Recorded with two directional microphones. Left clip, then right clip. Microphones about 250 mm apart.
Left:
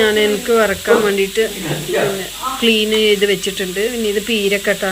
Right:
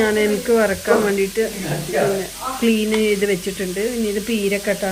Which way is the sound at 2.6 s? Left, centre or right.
Centre.